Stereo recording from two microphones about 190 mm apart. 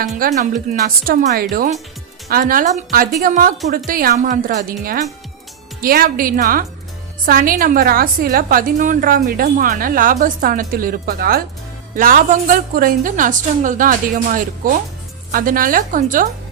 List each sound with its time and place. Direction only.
0.0 s a woman's voice: 40° right (ahead or behind)
5.8 s a woman's voice: 50° right (ahead or behind)